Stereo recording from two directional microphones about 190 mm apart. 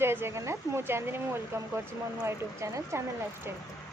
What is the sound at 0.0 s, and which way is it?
A woman's voice, 10° right (ahead or behind).